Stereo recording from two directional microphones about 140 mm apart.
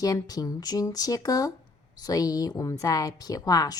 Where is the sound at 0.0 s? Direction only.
25° left (ahead or behind).